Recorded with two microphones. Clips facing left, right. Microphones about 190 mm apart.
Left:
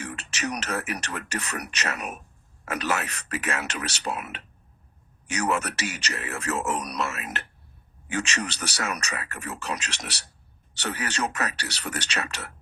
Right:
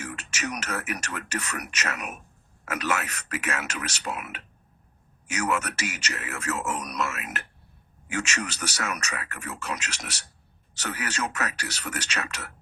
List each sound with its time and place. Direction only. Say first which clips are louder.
0.0 s speech: left 2 dB; 30° left (ahead or behind)